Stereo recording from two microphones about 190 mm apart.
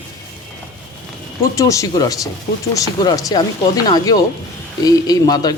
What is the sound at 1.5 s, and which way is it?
A man's voice, 15° left (ahead or behind).